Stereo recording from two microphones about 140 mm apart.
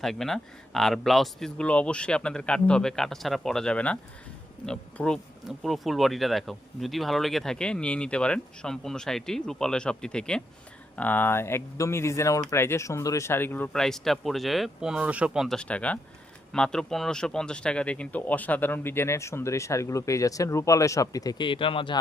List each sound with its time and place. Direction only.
0.0 s speech: 5° left (ahead or behind)
13.7 s speech: 5° left (ahead or behind); by 21.9 s 40° left (ahead or behind)